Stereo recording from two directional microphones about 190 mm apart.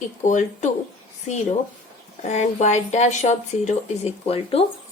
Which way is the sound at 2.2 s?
35° left (ahead or behind).